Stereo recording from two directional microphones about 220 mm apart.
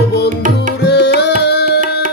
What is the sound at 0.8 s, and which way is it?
Music, 50° left (ahead or behind).